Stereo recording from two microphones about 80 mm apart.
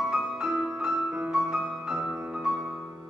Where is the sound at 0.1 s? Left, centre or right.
Centre.